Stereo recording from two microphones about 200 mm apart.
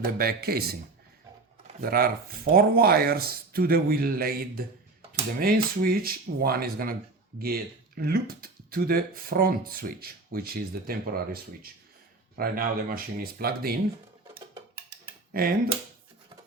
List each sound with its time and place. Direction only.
0.0 s speech: 50° right (ahead or behind)
1.8 s speech: 50° right (ahead or behind)
15.3 s speech: 45° right (ahead or behind)